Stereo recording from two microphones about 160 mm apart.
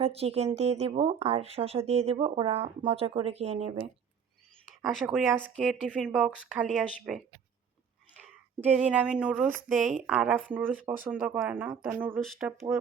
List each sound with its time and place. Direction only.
0.0 s speech: 40° right (ahead or behind)
4.6 s a sound: centre (ahead or behind)
5.4 s speech: 5° left (ahead or behind)
5.8 s speech: 5° right (ahead or behind)
8.6 s speech: 5° right (ahead or behind)
12.2 s speech: centre (ahead or behind)
12.5 s speech: 15° right (ahead or behind)